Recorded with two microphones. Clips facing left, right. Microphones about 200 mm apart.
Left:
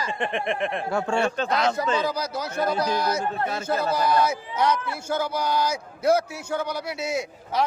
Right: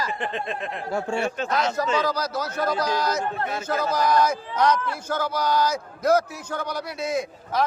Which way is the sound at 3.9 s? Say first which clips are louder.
Right 3 dB; 10° left (ahead or behind).